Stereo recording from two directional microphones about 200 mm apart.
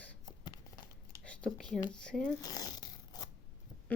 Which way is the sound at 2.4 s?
20° left (ahead or behind).